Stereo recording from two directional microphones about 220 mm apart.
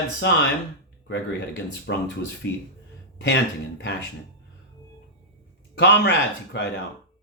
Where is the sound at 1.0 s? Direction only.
55° left (ahead or behind).